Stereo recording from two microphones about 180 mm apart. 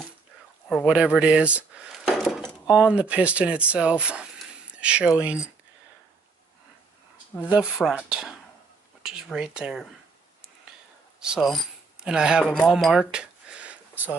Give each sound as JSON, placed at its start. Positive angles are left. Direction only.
{"t": 0.7, "sound": "speech", "side_deg": 0}
{"t": 7.4, "sound": "speech", "side_deg": -5}
{"t": 11.1, "sound": "speech", "side_deg": -5}
{"t": 12.5, "sound": "a sound", "side_deg": 0}